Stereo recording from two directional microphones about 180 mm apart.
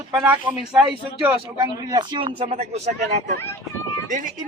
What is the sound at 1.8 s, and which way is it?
A man's voice, 25° right (ahead or behind).